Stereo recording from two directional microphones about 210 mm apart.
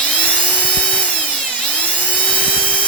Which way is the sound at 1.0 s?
5° left (ahead or behind).